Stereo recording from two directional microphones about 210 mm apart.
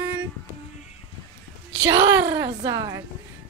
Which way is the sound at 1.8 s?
15° right (ahead or behind).